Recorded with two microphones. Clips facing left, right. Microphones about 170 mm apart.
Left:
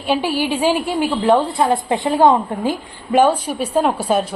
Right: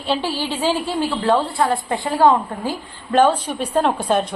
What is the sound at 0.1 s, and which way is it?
A woman's voice, 15° left (ahead or behind).